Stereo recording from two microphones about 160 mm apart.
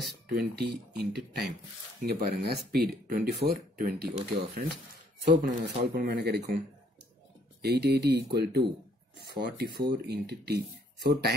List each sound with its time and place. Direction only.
0.0 s speech: 85° right
7.6 s speech: 90° right